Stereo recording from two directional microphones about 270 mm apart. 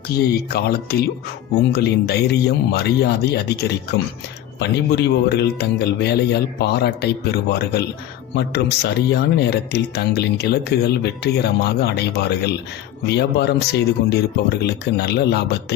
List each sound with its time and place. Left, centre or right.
0.1 s speech: left